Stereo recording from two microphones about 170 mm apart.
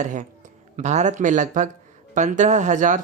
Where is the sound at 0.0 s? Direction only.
45° right (ahead or behind).